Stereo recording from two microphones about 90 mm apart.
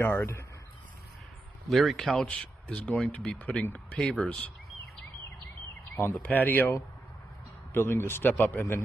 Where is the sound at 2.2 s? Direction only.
10° left (ahead or behind).